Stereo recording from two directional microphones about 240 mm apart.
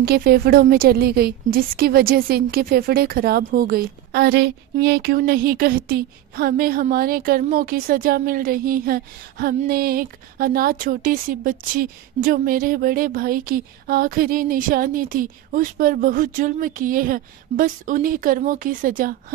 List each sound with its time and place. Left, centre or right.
0.0 s a woman's voice: right